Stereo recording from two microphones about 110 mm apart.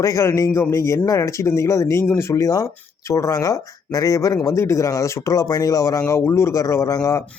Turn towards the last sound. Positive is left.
turn(degrees=30)  # may be behind; listen again after turning